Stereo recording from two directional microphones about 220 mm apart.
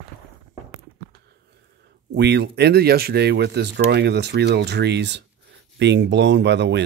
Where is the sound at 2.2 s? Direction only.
50° right (ahead or behind).